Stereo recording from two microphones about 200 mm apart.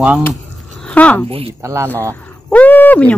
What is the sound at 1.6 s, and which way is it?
Speech, 15° right (ahead or behind).